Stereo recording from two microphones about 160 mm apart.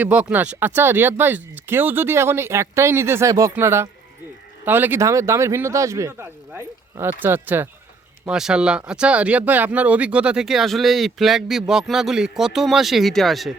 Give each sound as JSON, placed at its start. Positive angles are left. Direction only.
{"t": 0.0, "sound": "speech", "side_deg": -10}